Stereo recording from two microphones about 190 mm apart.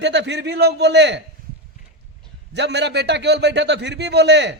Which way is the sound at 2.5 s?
65° right (ahead or behind).